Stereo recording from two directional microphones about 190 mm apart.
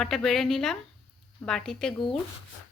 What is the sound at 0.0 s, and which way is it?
Speech, centre (ahead or behind).